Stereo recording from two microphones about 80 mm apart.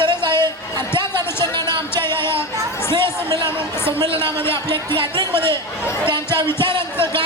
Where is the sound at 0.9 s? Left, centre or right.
Left.